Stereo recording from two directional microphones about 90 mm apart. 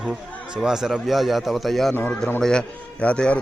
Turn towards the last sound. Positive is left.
turn(degrees=15)  # may be behind; listen again after turning